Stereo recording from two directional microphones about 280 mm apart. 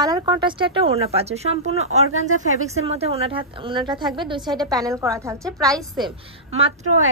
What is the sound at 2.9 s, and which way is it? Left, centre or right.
A woman's voice, right.